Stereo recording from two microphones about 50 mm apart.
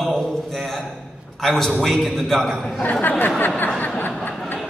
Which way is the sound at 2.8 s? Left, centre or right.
Left.